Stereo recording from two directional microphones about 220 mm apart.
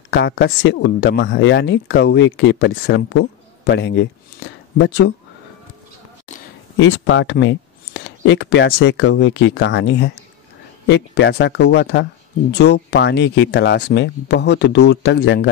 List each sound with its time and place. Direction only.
0.1 s speech: 50° left (ahead or behind)
6.8 s speech: 55° left (ahead or behind)